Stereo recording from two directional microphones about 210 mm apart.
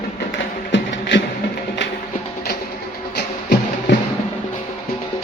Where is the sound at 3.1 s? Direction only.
55° left (ahead or behind).